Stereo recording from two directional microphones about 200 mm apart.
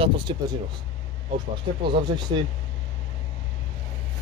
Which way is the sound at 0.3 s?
25° right (ahead or behind).